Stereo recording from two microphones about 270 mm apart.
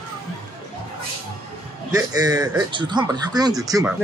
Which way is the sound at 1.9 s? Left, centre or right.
Centre.